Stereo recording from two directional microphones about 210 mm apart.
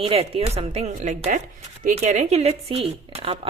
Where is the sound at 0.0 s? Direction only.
25° right (ahead or behind).